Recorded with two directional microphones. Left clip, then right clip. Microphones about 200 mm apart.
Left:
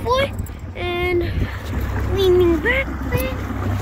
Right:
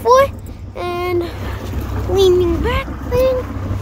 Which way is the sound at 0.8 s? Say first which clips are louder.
Right 2 dB; 10° right (ahead or behind).